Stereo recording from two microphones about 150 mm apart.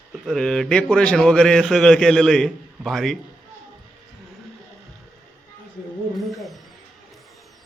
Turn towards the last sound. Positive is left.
turn(degrees=0)  # may be behind; listen again after turning